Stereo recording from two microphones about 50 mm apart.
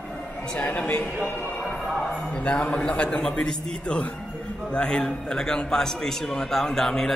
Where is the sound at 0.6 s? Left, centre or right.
Left.